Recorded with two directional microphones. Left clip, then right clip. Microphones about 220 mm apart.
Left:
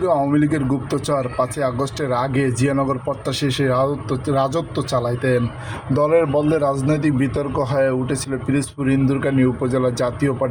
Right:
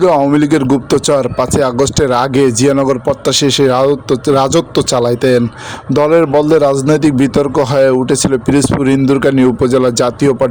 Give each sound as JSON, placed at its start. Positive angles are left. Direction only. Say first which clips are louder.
{"t": 0.0, "sound": "speech", "louder": "right 8 dB", "side_deg": -40}